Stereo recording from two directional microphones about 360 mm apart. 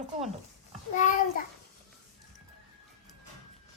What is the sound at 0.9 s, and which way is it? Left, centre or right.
Speech, left.